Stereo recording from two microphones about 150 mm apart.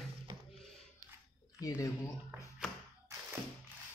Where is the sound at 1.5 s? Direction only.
20° left (ahead or behind).